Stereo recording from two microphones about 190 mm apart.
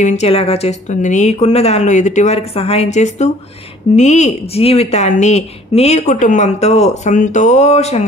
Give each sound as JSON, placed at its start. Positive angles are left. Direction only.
{"t": 0.0, "sound": "speech", "side_deg": 35}